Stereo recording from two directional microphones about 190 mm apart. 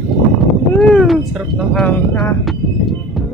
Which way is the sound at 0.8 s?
Centre (ahead or behind).